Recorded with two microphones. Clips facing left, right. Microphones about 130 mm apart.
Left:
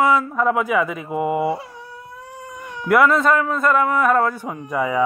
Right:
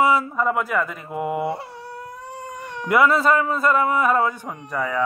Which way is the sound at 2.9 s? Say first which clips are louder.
Left 2 dB; centre (ahead or behind).